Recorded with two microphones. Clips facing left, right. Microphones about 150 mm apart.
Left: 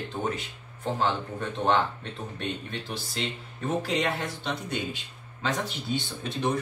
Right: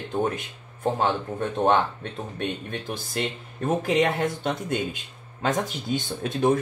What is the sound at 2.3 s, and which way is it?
Speech, 55° right (ahead or behind).